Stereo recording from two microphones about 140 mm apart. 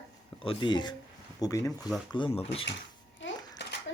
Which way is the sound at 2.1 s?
40° left (ahead or behind).